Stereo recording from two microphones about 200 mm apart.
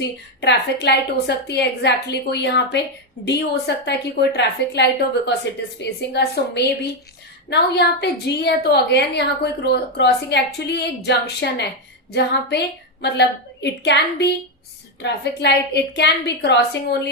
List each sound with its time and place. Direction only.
0.4 s a woman's voice: 60° left (ahead or behind)